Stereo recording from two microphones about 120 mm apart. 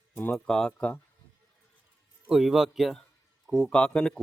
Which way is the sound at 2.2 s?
5° right (ahead or behind).